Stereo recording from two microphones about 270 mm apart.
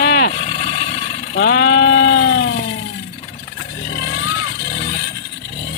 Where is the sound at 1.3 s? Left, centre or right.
Left.